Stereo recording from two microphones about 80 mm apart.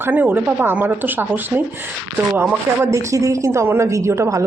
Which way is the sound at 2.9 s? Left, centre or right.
Right.